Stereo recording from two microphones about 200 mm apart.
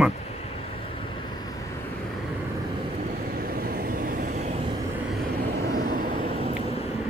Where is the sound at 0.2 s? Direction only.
30° left (ahead or behind).